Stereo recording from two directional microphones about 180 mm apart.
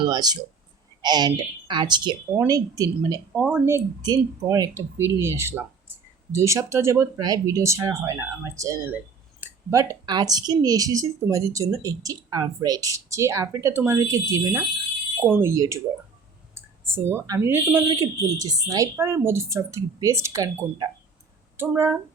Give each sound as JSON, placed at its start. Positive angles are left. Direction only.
{"t": 0.0, "sound": "speech", "side_deg": -25}